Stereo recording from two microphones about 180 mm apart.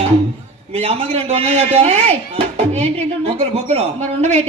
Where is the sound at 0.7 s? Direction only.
35° right (ahead or behind).